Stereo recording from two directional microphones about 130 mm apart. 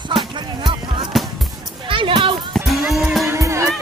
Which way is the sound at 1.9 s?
40° right (ahead or behind).